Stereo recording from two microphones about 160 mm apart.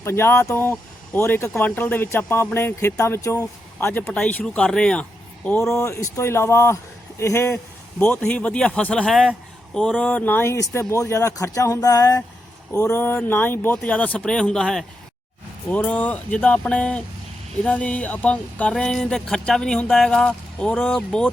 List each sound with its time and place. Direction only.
0.0 s speech: 15° left (ahead or behind)
5.7 s speech: 15° left (ahead or behind)